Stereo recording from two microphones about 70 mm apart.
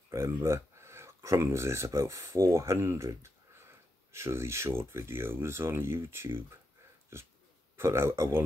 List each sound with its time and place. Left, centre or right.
0.3 s speech: right